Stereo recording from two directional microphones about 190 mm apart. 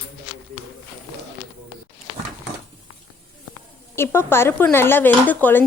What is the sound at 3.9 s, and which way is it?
Speech, 10° left (ahead or behind).